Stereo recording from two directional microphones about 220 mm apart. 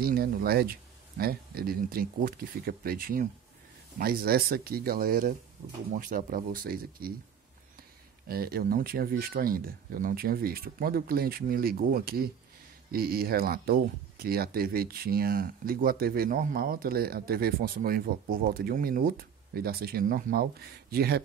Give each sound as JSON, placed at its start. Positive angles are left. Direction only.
{"t": 0.0, "sound": "speech", "side_deg": -45}
{"t": 8.3, "sound": "speech", "side_deg": -45}